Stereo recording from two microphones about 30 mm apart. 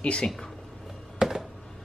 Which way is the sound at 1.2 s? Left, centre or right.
Right.